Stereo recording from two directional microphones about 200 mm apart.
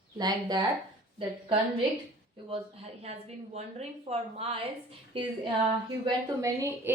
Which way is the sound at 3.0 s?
35° right (ahead or behind).